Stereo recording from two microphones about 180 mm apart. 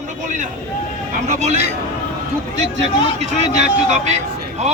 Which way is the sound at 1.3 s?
40° right (ahead or behind).